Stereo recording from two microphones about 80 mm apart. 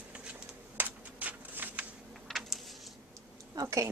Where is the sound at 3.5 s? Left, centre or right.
Right.